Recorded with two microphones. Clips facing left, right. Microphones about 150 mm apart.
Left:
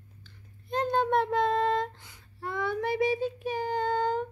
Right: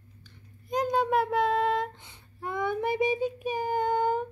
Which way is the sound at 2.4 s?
15° right (ahead or behind).